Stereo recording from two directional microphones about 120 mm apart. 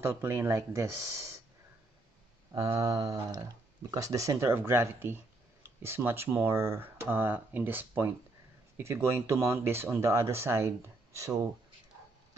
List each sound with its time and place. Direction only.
0.0 s speech: 20° right (ahead or behind)
2.5 s speech: 30° right (ahead or behind)